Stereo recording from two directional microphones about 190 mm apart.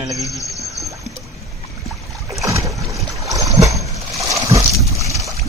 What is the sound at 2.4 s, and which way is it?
Boat, 15° right (ahead or behind).